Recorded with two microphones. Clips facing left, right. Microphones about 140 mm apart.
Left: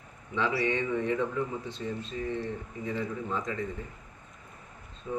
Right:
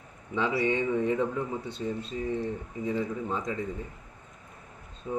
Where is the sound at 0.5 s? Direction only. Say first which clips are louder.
Right 4 dB; 15° right (ahead or behind).